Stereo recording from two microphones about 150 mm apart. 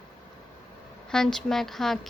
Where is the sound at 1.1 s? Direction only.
5° left (ahead or behind).